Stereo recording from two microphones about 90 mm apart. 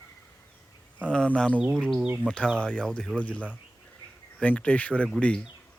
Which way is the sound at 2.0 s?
20° right (ahead or behind).